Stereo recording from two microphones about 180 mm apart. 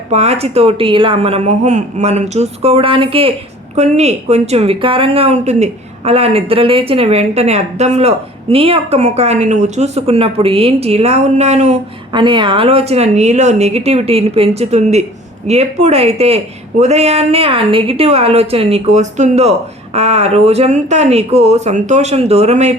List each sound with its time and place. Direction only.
0.1 s a woman's voice: 35° right (ahead or behind)
12.1 s a woman's voice: 25° right (ahead or behind)